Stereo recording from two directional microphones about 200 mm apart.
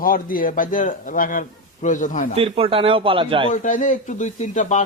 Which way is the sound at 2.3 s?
30° right (ahead or behind).